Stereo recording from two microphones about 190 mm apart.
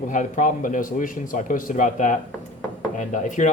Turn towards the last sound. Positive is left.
turn(degrees=40)  # may be behind; listen again after turning